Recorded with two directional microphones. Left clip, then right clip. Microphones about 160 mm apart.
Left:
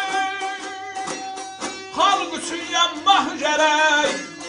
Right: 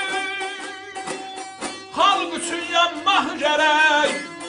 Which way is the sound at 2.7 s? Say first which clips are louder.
Left 1 dB; 5° right (ahead or behind).